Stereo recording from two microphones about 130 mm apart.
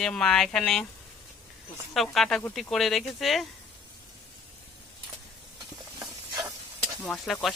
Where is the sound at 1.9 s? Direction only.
Centre (ahead or behind).